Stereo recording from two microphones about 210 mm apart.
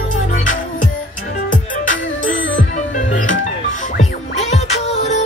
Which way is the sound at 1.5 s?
40° left (ahead or behind).